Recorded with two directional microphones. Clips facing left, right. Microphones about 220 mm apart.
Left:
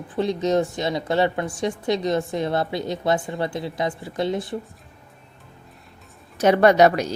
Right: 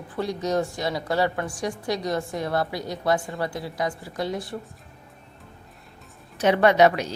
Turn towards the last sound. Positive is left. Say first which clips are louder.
# left 2 dB
turn(degrees=40)  # may be behind; listen again after turning